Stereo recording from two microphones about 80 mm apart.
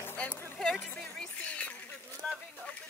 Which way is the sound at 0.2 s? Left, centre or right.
Left.